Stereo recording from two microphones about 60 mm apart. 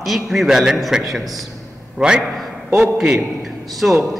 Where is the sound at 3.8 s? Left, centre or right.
Right.